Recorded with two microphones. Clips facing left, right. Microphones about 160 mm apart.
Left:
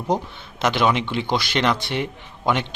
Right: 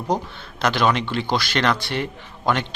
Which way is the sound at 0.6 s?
20° left (ahead or behind).